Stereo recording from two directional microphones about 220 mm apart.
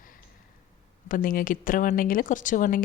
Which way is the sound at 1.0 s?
40° left (ahead or behind).